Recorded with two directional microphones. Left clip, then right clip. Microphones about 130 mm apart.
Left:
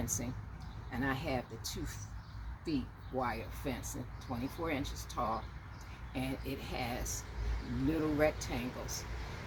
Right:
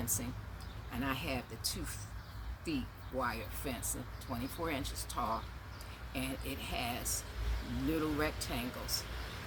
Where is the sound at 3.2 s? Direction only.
30° right (ahead or behind).